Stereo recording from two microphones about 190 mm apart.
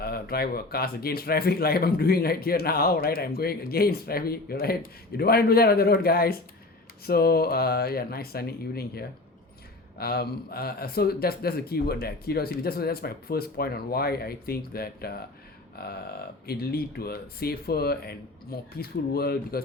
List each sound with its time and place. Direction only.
0.0 s speech: 55° left (ahead or behind)
15.7 s a sound: 55° left (ahead or behind)
16.5 s speech: 55° left (ahead or behind)